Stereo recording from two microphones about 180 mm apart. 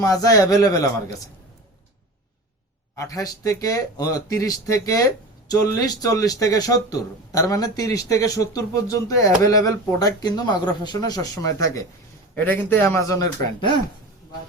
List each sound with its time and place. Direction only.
0.0 s speech: 20° left (ahead or behind)
2.9 s speech: 20° left (ahead or behind)